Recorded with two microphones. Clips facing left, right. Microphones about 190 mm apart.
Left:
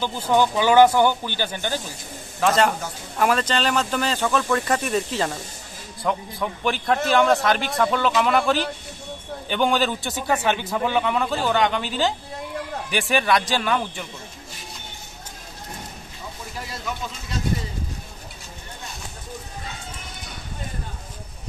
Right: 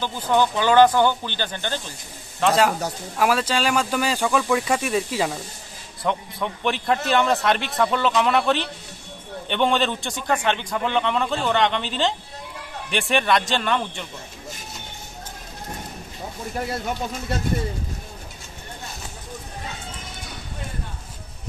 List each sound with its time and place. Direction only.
0.0 s speech: 10° left (ahead or behind)
2.4 s a man's voice: 5° right (ahead or behind)
16.5 s speech: 55° right (ahead or behind)